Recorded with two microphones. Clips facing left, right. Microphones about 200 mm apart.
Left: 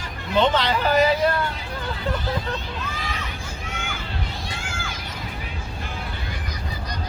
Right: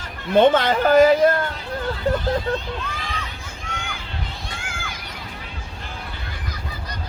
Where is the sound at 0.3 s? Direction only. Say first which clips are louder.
Right 5 dB; 50° right (ahead or behind).